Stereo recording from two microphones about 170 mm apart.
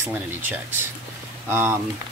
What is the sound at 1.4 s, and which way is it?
Speech, 15° right (ahead or behind).